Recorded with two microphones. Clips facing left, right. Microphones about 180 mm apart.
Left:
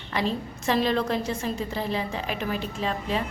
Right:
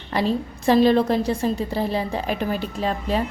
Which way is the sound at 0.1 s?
35° right (ahead or behind).